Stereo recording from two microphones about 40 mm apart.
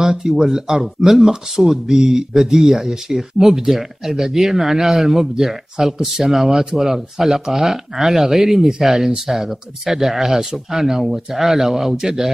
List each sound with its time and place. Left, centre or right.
0.0 s speech: centre
1.0 s speech: centre